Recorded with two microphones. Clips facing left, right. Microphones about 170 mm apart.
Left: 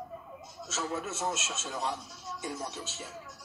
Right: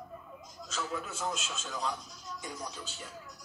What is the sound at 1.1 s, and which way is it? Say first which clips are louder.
Speech: left 2 dB; 5° left (ahead or behind).